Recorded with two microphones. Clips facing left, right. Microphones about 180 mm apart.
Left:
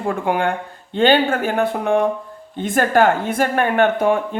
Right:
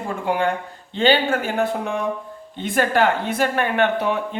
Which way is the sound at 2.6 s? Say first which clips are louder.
Left 3 dB; 45° left (ahead or behind).